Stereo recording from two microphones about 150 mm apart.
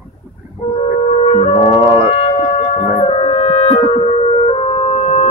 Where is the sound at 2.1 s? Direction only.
45° left (ahead or behind).